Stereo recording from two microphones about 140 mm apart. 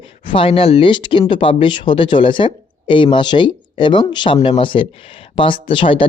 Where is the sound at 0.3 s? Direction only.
40° left (ahead or behind).